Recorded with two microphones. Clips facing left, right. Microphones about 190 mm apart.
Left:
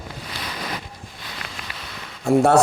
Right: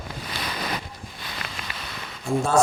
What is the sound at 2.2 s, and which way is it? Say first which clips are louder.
Speech: left 8 dB; 65° left (ahead or behind).